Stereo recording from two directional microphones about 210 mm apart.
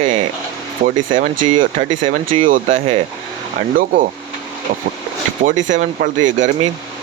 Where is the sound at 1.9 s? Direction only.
20° right (ahead or behind).